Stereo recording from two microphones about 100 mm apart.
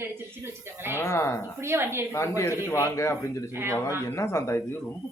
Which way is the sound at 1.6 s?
25° right (ahead or behind).